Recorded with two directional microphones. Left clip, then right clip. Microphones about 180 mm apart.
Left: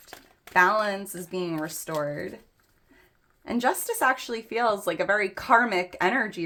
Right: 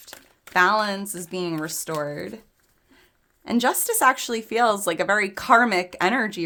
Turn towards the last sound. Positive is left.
turn(degrees=-40)  # may be behind; listen again after turning